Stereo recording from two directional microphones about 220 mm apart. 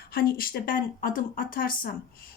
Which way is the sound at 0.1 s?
40° left (ahead or behind).